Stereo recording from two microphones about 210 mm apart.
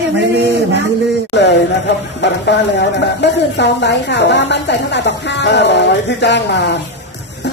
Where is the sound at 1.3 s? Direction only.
55° left (ahead or behind).